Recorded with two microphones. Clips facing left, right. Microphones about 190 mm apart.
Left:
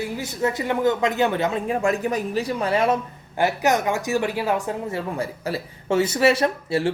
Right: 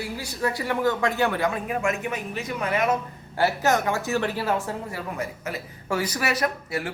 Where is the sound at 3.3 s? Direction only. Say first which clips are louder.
Left 2 dB; 15° left (ahead or behind).